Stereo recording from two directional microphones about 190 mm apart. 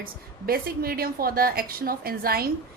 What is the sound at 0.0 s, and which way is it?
Speech, 50° right (ahead or behind).